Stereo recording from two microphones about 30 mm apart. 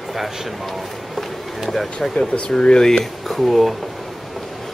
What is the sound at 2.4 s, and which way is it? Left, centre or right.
Speech, left.